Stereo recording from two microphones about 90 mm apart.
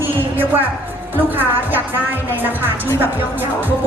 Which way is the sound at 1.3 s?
20° right (ahead or behind).